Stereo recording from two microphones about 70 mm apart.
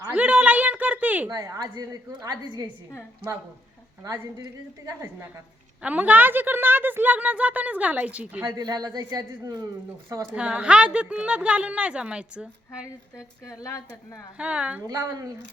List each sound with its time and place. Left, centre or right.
0.1 s a sound: centre
1.3 s a woman's voice: right
5.8 s a woman's voice: right
8.5 s speech: right
10.3 s a woman's voice: centre
13.4 s speech: left
14.3 s a woman's voice: centre
14.8 s a woman's voice: right